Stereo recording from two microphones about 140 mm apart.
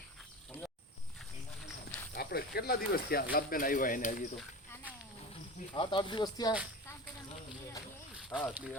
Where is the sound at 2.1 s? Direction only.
90° left; by 4.3 s 70° left (ahead or behind).